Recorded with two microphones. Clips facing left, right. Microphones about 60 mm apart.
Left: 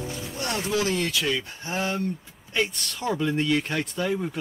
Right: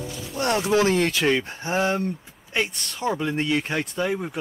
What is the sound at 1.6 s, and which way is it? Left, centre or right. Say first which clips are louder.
Speech: right 5 dB; right.